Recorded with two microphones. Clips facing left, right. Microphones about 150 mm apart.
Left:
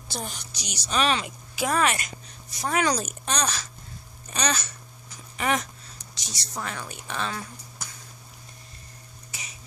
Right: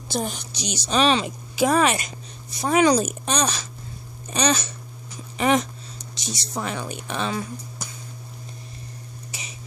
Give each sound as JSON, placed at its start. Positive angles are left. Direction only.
{"t": 0.1, "sound": "a woman's voice", "side_deg": -20}